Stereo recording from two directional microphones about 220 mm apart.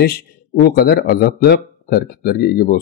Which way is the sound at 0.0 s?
45° left (ahead or behind).